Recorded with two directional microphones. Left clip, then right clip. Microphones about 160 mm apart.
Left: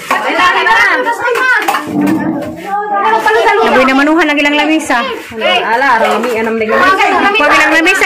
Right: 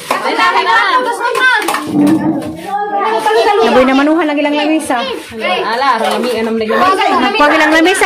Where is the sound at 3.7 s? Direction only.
10° right (ahead or behind).